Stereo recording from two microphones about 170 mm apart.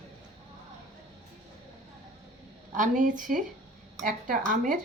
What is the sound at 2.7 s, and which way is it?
Speech, 50° right (ahead or behind).